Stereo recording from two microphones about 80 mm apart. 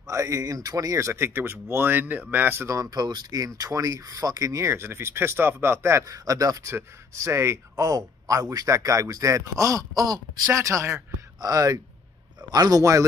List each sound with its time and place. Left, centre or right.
0.1 s speech: right
2.7 s speech: right
10.5 s speech: right
11.4 s speech: right